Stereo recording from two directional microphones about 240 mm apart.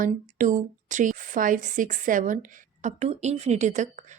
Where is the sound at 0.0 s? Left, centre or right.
Right.